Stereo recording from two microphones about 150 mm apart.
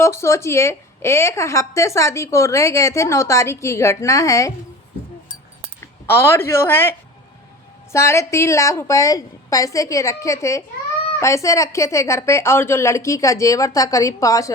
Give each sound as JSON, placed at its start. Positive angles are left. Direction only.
{"t": 0.0, "sound": "a woman's voice", "side_deg": 20}
{"t": 6.1, "sound": "speech", "side_deg": 15}
{"t": 7.9, "sound": "a woman's voice", "side_deg": 20}